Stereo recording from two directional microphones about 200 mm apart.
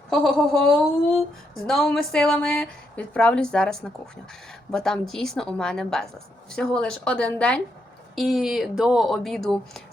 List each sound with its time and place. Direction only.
0.1 s a woman's voice: centre (ahead or behind)